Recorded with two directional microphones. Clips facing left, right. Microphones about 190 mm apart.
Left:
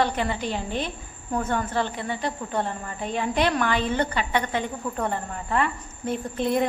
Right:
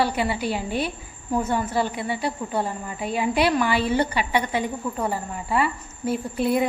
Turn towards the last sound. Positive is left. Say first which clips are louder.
# right 2 dB
turn(degrees=-10)  # may be behind; listen again after turning